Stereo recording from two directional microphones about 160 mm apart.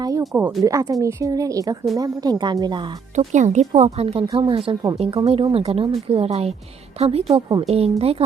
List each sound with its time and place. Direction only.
0.0 s a woman's voice: 20° right (ahead or behind)
3.2 s speech: 50° right (ahead or behind); by 4.9 s 30° right (ahead or behind)
4.9 s speech: 40° right (ahead or behind)